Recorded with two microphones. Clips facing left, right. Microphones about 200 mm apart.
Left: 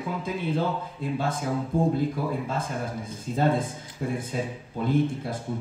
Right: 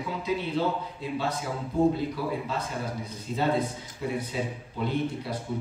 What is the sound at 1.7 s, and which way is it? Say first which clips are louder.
Speech: right 3 dB; 50° left (ahead or behind).